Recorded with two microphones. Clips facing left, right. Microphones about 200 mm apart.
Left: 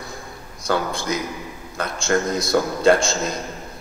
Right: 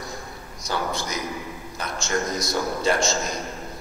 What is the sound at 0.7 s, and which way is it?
A man's voice, 55° left (ahead or behind).